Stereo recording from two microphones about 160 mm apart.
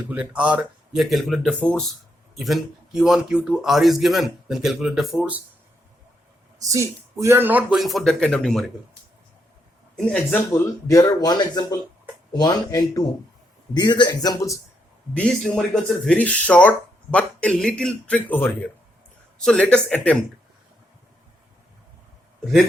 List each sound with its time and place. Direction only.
0.1 s speech: 10° right (ahead or behind)
6.6 s speech: 20° right (ahead or behind); by 8.7 s centre (ahead or behind)
9.9 s speech: 5° left (ahead or behind)
10.5 s speech: 20° left (ahead or behind)
15.1 s speech: 5° left (ahead or behind)